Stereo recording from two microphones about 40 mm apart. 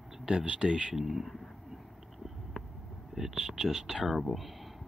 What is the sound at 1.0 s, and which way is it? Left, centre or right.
Speech, centre.